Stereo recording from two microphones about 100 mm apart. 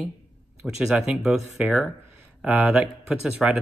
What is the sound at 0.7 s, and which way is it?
Speech, 5° right (ahead or behind).